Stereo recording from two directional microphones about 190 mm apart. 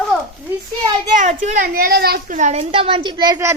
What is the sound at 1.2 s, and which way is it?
A child's voice, 40° right (ahead or behind).